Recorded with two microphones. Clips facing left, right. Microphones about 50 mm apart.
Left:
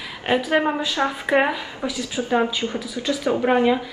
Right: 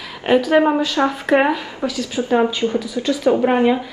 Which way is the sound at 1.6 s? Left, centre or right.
Centre.